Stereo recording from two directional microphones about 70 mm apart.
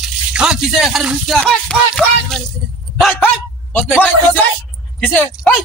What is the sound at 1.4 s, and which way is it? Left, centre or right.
Music, centre.